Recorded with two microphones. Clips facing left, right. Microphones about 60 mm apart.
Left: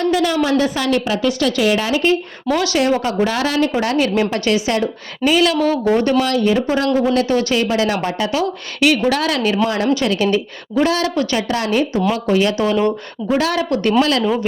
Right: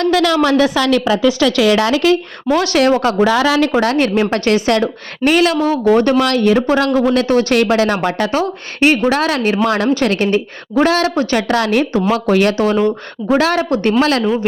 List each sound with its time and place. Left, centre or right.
0.0 s a woman's voice: right
2.5 s speech: right
2.7 s a woman's voice: right
3.8 s a woman's voice: right
7.6 s speech: right
8.0 s a woman's voice: right
11.1 s speech: right
11.3 s speech: right
13.2 s a woman's voice: right